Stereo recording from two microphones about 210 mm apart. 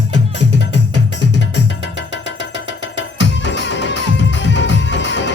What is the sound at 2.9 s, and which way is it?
Music, 60° left (ahead or behind).